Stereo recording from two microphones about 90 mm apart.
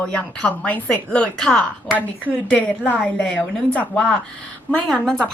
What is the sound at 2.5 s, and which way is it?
A woman's voice, 15° left (ahead or behind).